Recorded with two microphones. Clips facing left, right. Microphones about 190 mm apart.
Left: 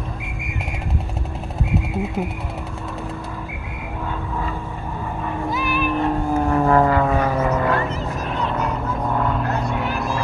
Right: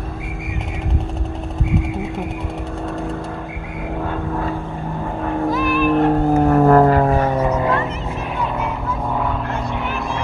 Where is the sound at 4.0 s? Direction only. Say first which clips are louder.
Right 4 dB; 55° right (ahead or behind).